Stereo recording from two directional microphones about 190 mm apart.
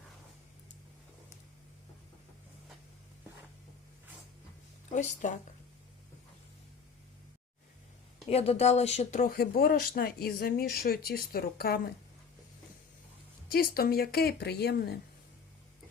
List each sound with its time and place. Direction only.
4.9 s speech: 40° left (ahead or behind)
8.3 s speech: 35° left (ahead or behind); by 11.8 s 55° left (ahead or behind)
13.5 s a woman's voice: 50° left (ahead or behind)